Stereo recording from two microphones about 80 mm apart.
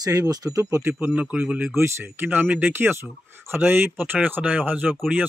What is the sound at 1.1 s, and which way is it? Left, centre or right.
Speech, centre.